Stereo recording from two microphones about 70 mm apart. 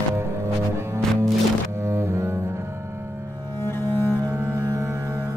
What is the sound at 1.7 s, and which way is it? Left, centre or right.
Double bass, right.